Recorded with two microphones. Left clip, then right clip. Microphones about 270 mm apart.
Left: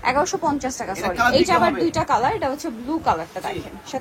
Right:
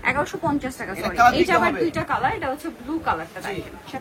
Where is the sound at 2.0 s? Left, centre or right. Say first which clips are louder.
Left 3 dB; centre.